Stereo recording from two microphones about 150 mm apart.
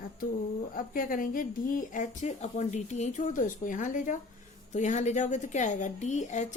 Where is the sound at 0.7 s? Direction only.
65° left (ahead or behind).